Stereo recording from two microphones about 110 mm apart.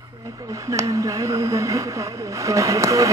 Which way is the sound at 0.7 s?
30° right (ahead or behind).